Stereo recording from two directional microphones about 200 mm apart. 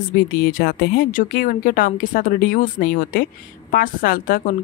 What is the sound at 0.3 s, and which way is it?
A woman's voice, 45° left (ahead or behind).